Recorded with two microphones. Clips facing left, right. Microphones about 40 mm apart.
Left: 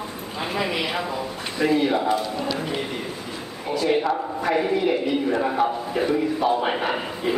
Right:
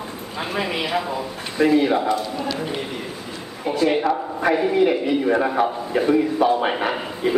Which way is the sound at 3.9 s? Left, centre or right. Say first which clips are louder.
Right 1 dB; centre.